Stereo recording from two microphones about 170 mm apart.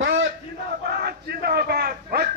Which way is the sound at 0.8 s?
65° right (ahead or behind).